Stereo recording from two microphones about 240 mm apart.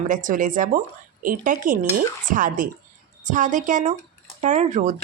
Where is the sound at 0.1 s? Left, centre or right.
Right.